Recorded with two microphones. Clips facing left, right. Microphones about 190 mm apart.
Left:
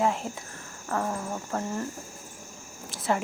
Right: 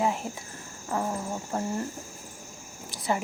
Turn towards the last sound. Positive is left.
turn(degrees=0)  # may be behind; listen again after turning